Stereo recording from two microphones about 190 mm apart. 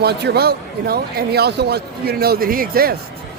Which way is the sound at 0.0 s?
60° right (ahead or behind).